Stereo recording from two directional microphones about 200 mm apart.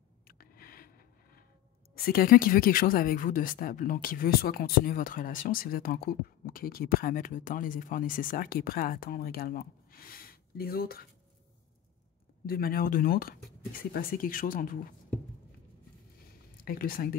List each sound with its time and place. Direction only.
0.3 s a sound: 45° left (ahead or behind)
2.0 s speech: 50° left (ahead or behind)
12.4 s speech: 45° left (ahead or behind)
16.6 s speech: 45° left (ahead or behind)